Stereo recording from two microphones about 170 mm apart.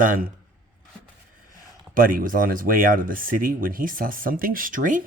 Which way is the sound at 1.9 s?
55° right (ahead or behind).